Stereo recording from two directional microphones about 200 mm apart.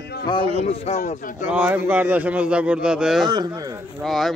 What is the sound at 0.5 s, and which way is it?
Speech, 30° left (ahead or behind).